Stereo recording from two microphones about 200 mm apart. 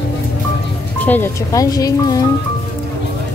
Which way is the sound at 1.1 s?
15° left (ahead or behind).